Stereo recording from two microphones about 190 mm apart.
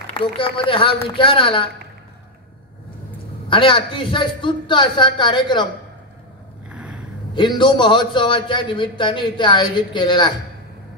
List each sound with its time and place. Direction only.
0.1 s a man's voice: 25° left (ahead or behind)
3.4 s a man's voice: 25° left (ahead or behind)
6.7 s a sound: 5° right (ahead or behind)
7.3 s a man's voice: 25° left (ahead or behind)